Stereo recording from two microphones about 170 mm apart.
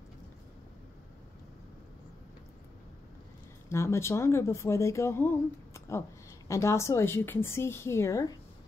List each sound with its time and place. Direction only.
3.6 s speech: 15° left (ahead or behind)